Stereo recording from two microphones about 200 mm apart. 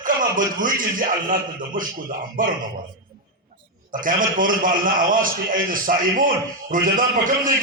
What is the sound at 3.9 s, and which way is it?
A man's voice, 45° right (ahead or behind).